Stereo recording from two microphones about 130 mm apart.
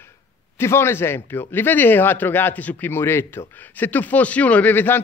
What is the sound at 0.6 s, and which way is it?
Speech, 20° left (ahead or behind).